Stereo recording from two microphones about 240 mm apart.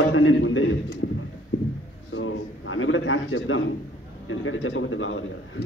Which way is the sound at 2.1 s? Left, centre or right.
Left.